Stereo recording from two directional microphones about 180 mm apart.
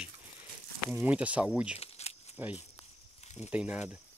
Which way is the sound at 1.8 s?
35° left (ahead or behind).